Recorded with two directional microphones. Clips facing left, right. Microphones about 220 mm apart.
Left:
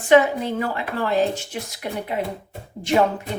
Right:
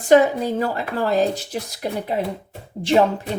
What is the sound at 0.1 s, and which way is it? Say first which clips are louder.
Speech: right 2 dB; 35° right (ahead or behind).